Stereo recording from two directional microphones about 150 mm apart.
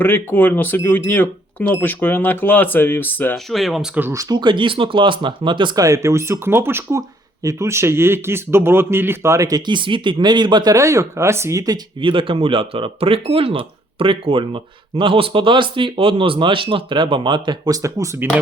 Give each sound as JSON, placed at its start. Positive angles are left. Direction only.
{"t": 0.0, "sound": "speech", "side_deg": 15}
{"t": 3.3, "sound": "speech", "side_deg": 0}
{"t": 3.9, "sound": "speech", "side_deg": -15}